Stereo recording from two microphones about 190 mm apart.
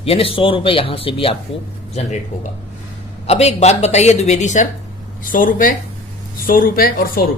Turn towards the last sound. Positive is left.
turn(degrees=50)  # may be behind; listen again after turning